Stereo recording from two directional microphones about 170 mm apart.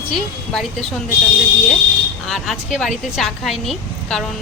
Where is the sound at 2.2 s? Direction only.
Centre (ahead or behind).